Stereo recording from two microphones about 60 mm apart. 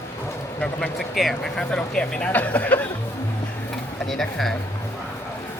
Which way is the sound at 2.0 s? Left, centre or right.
Centre.